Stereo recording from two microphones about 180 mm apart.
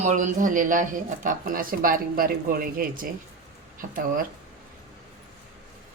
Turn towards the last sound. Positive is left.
turn(degrees=-50)  # may be behind; listen again after turning